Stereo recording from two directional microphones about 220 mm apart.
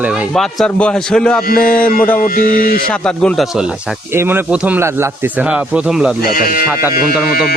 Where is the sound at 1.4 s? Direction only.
40° left (ahead or behind).